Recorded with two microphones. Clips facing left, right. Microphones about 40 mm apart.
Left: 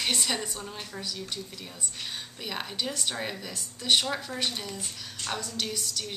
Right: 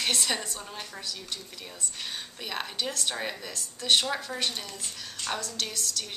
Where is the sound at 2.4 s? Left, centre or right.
Centre.